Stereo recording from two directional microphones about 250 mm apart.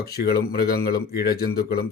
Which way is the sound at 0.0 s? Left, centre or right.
Left.